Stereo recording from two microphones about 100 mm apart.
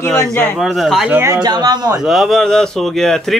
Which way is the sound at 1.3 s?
45° right (ahead or behind).